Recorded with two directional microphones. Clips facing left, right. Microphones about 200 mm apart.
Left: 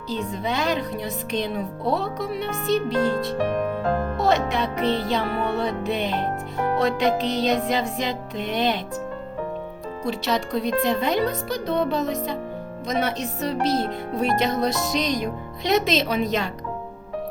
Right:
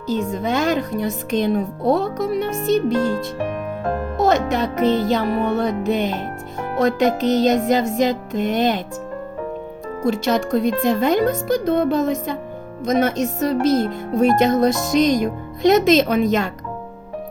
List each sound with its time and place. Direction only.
0.1 s music: 45° right (ahead or behind)
4.2 s music: 45° right (ahead or behind)
10.0 s music: 45° right (ahead or behind)